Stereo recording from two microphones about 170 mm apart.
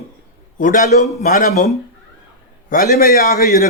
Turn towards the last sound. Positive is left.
turn(degrees=60)  # may be behind; listen again after turning